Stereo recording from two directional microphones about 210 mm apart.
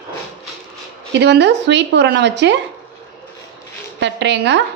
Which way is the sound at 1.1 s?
55° right (ahead or behind).